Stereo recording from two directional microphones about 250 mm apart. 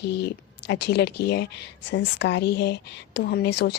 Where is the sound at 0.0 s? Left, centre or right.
Left.